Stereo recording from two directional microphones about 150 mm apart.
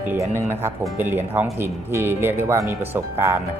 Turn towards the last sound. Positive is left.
turn(degrees=-15)  # may be behind; listen again after turning